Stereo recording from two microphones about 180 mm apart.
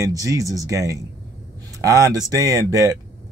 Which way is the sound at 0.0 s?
20° right (ahead or behind).